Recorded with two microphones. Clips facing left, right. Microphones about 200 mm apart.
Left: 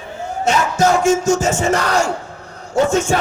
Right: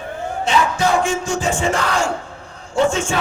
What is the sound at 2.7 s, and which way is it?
Speech, 40° left (ahead or behind).